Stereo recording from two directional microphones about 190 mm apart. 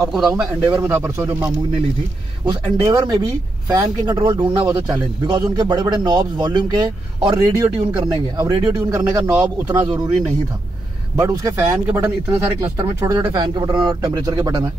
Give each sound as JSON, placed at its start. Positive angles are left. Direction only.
{"t": 0.0, "sound": "a man's voice", "side_deg": 0}
{"t": 0.3, "sound": "speech", "side_deg": -15}
{"t": 11.1, "sound": "speech", "side_deg": -15}